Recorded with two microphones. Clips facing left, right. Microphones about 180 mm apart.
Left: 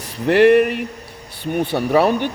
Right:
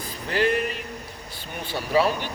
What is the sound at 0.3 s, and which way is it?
A man's voice, 65° left (ahead or behind).